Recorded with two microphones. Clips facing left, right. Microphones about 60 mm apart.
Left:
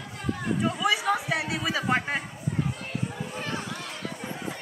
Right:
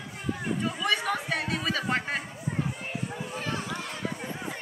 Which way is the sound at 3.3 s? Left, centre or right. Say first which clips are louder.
Even; centre.